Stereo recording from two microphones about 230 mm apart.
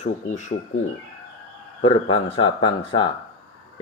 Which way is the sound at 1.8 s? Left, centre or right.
Left.